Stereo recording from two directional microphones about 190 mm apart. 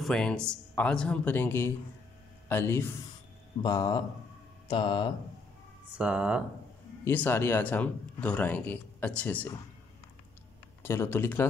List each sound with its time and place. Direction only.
0.0 s speech: 5° left (ahead or behind); by 5.0 s 25° left (ahead or behind)
5.9 s speech: 5° right (ahead or behind)
7.1 s speech: 10° left (ahead or behind)
10.8 s speech: 15° left (ahead or behind)